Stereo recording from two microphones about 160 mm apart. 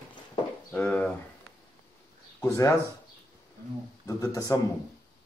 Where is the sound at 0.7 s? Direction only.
10° left (ahead or behind).